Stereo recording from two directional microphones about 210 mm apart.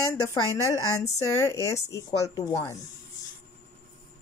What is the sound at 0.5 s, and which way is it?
Speech, 15° left (ahead or behind).